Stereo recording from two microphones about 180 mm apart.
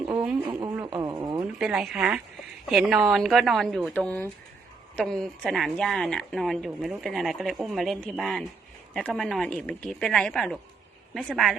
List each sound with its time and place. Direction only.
0.1 s radio: 10° right (ahead or behind)
0.9 s radio: 25° right (ahead or behind)
1.5 s speech: centre (ahead or behind)